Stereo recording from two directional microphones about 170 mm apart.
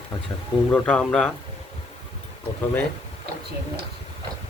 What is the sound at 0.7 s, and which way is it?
Speech, 5° left (ahead or behind).